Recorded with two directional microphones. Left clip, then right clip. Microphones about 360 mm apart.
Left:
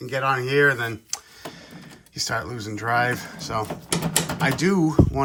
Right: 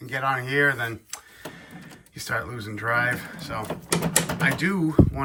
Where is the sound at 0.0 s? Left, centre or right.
Centre.